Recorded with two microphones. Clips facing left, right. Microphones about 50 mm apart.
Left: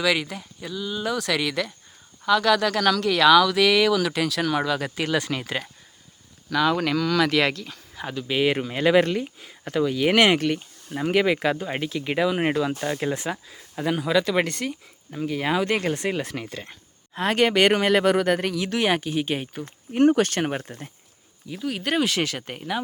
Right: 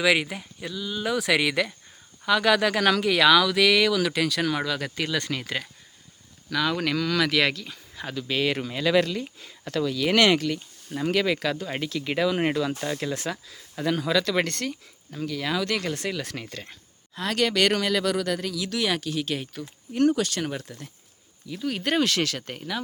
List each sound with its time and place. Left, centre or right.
0.0 s speech: centre
0.7 s speech: centre
15.3 s speech: left
16.2 s speech: centre
17.2 s speech: left
17.8 s speech: left
21.5 s speech: centre